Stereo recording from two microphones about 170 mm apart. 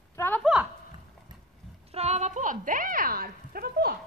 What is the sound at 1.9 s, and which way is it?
A woman's voice, 40° right (ahead or behind).